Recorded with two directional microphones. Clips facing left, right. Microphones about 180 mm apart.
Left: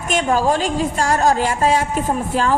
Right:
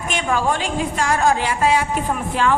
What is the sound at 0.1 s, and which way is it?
A woman's voice, 40° left (ahead or behind).